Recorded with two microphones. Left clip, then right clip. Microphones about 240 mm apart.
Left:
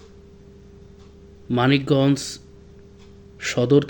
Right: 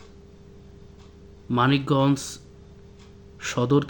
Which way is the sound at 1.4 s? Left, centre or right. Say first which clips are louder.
Left 2 dB; centre.